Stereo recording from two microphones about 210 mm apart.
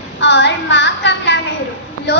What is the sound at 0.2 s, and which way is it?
Child singing, 55° left (ahead or behind).